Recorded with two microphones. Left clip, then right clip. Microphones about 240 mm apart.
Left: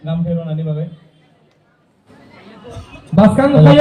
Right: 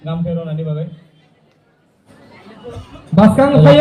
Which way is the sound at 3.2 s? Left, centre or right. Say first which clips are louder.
Even; right.